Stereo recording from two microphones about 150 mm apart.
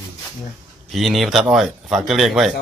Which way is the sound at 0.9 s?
Centre (ahead or behind).